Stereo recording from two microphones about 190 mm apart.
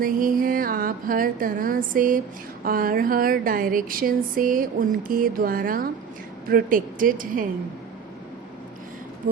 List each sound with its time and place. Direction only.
0.0 s speech: 45° right (ahead or behind)